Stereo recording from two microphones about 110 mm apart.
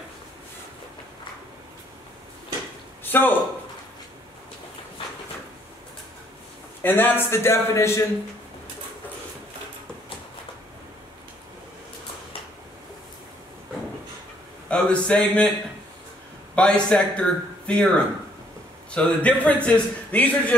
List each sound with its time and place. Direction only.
3.0 s a sound: 20° left (ahead or behind)
6.8 s speech: 20° left (ahead or behind)
14.7 s a man's voice: 10° left (ahead or behind)
16.5 s a man's voice: 10° left (ahead or behind)